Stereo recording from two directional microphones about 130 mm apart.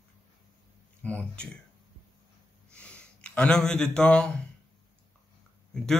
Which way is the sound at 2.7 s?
10° left (ahead or behind).